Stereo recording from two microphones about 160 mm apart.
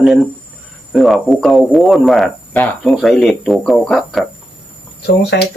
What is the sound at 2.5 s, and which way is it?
Speech, 10° left (ahead or behind).